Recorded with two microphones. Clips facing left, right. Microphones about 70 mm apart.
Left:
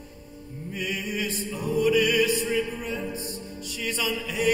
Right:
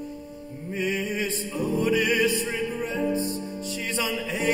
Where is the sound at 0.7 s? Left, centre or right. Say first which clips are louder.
Right 4 dB; right.